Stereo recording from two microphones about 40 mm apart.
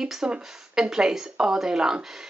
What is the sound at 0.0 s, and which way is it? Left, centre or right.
A woman's voice, centre.